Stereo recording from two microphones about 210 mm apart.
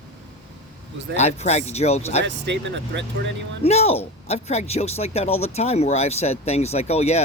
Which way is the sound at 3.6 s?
30° left (ahead or behind).